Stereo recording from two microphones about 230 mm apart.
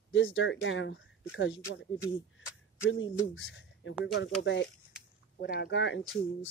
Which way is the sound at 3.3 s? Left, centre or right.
Left.